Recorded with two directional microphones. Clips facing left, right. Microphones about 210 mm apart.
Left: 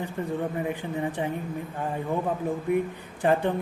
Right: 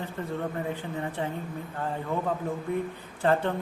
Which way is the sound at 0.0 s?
15° left (ahead or behind).